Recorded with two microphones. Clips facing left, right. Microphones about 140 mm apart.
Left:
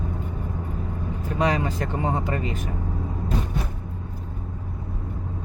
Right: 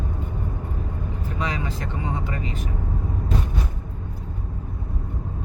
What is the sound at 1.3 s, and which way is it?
Speech, 40° left (ahead or behind).